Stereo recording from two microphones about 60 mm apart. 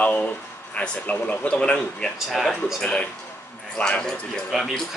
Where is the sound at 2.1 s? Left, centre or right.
Centre.